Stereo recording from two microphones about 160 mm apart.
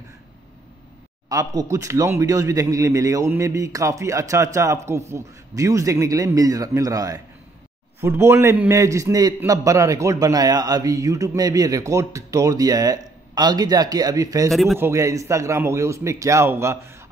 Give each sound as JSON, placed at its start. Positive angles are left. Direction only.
{"t": 1.3, "sound": "a man's voice", "side_deg": -20}
{"t": 14.5, "sound": "speech", "side_deg": 0}
{"t": 14.8, "sound": "a man's voice", "side_deg": -20}